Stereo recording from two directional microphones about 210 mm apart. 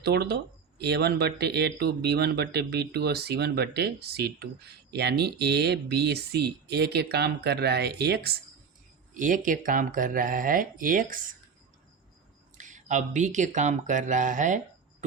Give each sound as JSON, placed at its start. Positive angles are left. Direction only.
{"t": 0.0, "sound": "speech", "side_deg": -50}
{"t": 9.1, "sound": "speech", "side_deg": -40}
{"t": 12.5, "sound": "speech", "side_deg": -35}